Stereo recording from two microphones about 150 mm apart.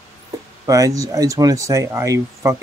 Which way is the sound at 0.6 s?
20° right (ahead or behind).